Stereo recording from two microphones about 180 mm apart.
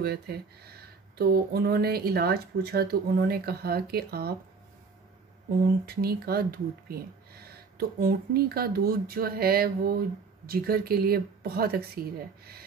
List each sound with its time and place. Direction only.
0.0 s speech: 60° right (ahead or behind)
5.9 s speech: 60° right (ahead or behind)